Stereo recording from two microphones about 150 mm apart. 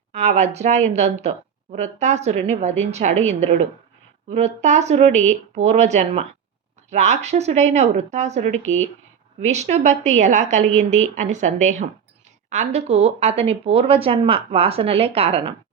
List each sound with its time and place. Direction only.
0.1 s a woman's voice: 50° right (ahead or behind)